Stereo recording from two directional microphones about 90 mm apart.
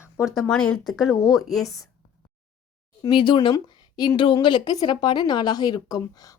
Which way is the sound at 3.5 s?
45° left (ahead or behind).